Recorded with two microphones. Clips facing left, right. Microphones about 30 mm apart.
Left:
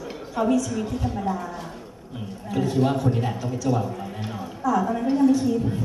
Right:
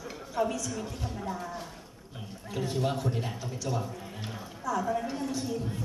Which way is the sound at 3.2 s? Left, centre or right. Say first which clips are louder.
Left 9 dB; left.